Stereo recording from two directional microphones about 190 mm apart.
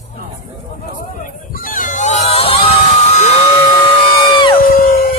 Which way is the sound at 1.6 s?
45° left (ahead or behind).